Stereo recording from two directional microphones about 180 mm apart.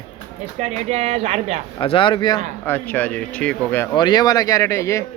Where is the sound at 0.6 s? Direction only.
35° right (ahead or behind).